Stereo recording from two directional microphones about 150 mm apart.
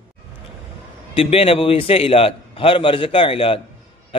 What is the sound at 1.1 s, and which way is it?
A man's voice, 40° left (ahead or behind).